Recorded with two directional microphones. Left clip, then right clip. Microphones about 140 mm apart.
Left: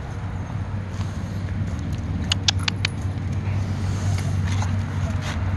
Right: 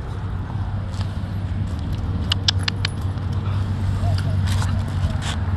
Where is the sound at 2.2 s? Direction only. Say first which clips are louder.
Right 1 dB; 40° left (ahead or behind).